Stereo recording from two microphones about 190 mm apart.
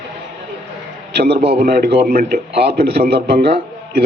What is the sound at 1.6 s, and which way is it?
A man's voice, 55° right (ahead or behind).